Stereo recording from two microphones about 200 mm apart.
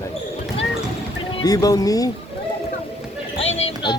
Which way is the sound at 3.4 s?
30° left (ahead or behind).